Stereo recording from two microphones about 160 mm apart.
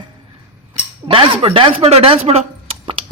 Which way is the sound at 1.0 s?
35° right (ahead or behind).